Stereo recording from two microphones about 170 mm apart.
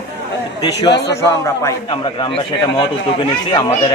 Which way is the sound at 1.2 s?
15° left (ahead or behind).